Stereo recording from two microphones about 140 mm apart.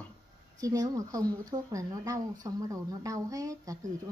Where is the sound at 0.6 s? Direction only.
25° right (ahead or behind).